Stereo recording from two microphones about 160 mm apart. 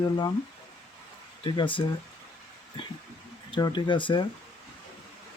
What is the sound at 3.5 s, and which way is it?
Speech, 30° left (ahead or behind).